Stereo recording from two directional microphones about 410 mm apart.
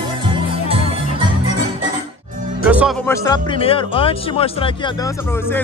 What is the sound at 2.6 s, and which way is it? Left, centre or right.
Speech, centre.